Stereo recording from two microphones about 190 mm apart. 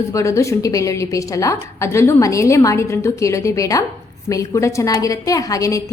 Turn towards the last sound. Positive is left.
turn(degrees=15)  # may be behind; listen again after turning